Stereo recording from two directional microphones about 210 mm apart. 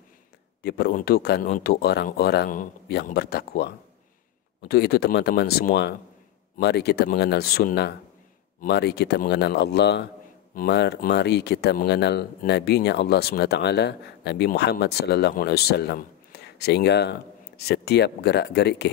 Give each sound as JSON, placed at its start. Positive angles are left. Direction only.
{"t": 0.6, "sound": "speech", "side_deg": 50}